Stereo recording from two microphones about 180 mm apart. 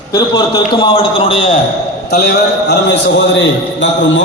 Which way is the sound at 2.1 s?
65° left (ahead or behind).